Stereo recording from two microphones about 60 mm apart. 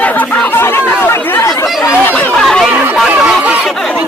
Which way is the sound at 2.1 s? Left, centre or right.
Left.